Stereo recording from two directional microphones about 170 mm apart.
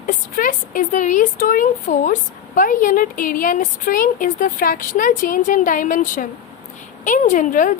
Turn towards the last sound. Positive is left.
turn(degrees=50)  # may be behind; listen again after turning